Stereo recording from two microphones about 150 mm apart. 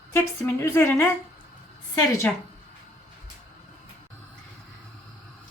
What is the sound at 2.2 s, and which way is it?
Speech, 10° left (ahead or behind).